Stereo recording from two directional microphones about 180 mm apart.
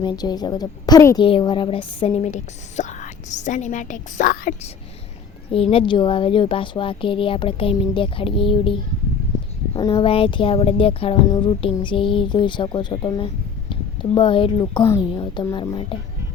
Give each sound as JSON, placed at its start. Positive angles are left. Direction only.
{"t": 0.0, "sound": "a woman's voice", "side_deg": 25}
{"t": 5.5, "sound": "speech", "side_deg": 30}